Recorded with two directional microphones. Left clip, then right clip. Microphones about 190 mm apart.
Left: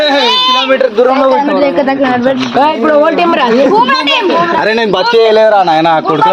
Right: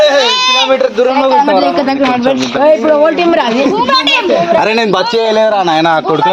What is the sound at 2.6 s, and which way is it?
Speech, 40° left (ahead or behind).